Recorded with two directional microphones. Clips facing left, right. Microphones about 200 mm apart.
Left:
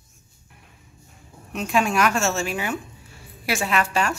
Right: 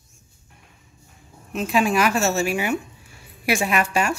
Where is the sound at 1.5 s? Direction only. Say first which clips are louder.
Right 2 dB; centre (ahead or behind).